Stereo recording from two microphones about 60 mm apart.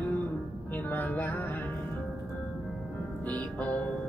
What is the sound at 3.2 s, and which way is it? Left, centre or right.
Music, left.